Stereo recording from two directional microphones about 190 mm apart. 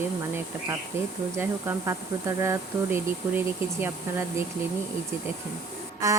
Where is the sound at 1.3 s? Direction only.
10° right (ahead or behind).